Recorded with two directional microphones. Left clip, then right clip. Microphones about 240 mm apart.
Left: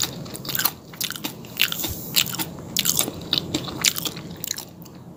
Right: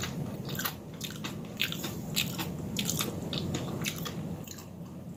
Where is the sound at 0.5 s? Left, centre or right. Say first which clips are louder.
Left 10 dB; left.